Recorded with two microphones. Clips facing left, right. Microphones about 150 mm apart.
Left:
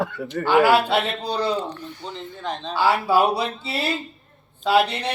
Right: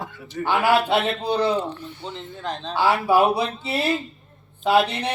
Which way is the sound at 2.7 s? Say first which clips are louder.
Right 1 dB; 20° right (ahead or behind).